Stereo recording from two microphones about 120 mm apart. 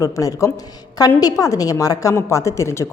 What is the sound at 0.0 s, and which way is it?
A woman's voice, 30° left (ahead or behind).